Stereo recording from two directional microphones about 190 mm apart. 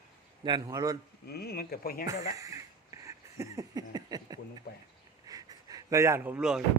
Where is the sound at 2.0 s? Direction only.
20° right (ahead or behind).